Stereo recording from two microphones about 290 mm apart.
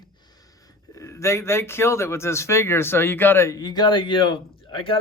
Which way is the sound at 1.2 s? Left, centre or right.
Centre.